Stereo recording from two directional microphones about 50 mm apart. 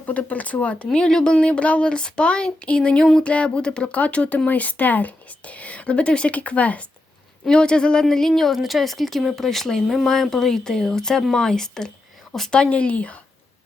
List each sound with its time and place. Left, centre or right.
0.0 s speech: left
0.9 s speech: centre
7.4 s speech: centre
8.0 s speech: centre
12.5 s speech: left